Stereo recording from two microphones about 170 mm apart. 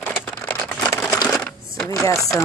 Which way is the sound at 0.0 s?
10° left (ahead or behind).